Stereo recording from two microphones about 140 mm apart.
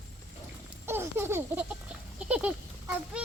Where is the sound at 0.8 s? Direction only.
15° right (ahead or behind).